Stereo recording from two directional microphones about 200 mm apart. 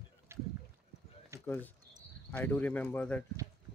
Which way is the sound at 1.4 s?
10° left (ahead or behind).